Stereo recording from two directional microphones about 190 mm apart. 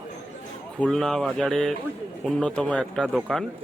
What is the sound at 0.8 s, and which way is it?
A man's voice, centre (ahead or behind).